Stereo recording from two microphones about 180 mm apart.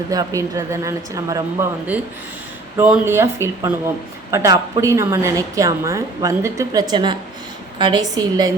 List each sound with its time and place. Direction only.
0.1 s a woman's voice: 20° right (ahead or behind)
2.7 s a woman's voice: 10° right (ahead or behind)